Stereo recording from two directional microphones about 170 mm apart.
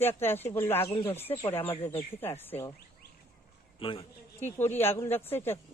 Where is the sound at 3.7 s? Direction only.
30° left (ahead or behind).